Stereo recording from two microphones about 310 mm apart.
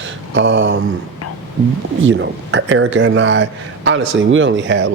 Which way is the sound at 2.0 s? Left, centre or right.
Right.